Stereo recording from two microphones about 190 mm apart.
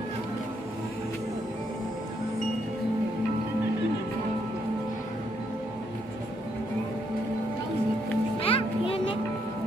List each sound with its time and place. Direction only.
8.4 s music: 30° left (ahead or behind)